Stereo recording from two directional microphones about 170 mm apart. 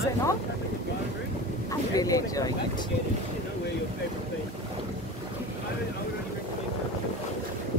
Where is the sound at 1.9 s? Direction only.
20° left (ahead or behind).